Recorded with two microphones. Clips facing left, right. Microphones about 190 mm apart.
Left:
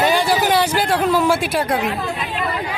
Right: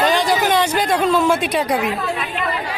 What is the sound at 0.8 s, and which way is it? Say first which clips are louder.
Speech: even; 10° left (ahead or behind).